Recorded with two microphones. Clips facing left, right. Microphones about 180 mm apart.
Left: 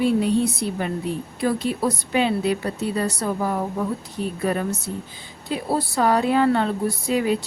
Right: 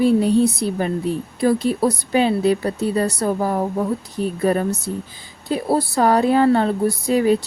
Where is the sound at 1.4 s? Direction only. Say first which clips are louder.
Right 5 dB; 40° right (ahead or behind).